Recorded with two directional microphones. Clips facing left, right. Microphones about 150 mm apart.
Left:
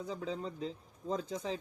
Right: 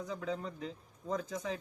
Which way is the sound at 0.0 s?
30° left (ahead or behind).